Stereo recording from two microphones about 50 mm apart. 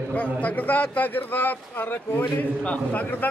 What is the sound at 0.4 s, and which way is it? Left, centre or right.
A man's voice, left.